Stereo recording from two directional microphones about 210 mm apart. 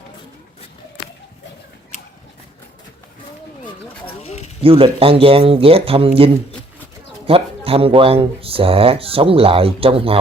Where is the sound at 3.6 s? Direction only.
25° left (ahead or behind).